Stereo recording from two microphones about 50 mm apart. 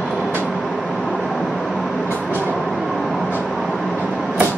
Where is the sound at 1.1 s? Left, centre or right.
Centre.